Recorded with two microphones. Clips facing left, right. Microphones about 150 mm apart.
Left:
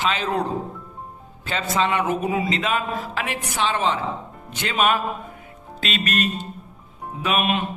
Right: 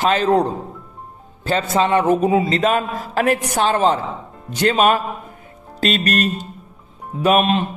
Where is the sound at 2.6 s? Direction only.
45° right (ahead or behind).